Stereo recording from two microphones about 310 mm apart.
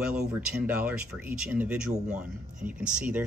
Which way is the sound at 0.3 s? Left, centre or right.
Centre.